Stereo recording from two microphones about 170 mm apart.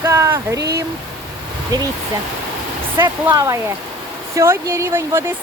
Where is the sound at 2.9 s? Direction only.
15° right (ahead or behind).